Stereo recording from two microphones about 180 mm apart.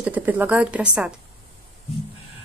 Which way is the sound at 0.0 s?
10° right (ahead or behind).